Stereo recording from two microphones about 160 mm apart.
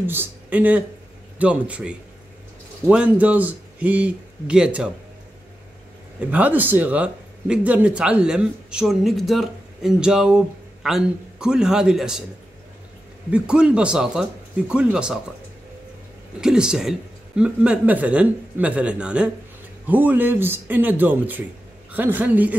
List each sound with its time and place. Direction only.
0.0 s a man's voice: 15° right (ahead or behind)
6.1 s speech: 10° right (ahead or behind)
13.3 s speech: 5° right (ahead or behind)
16.3 s a man's voice: 5° right (ahead or behind)